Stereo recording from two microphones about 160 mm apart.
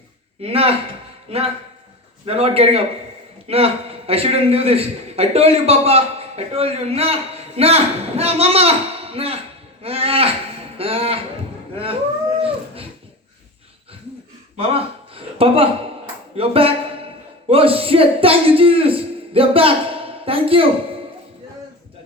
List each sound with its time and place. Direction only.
0.4 s a man's voice: 40° right (ahead or behind)
12.4 s dog: 35° right (ahead or behind)
14.5 s a sound: 35° right (ahead or behind)
16.3 s a man's voice: 35° right (ahead or behind)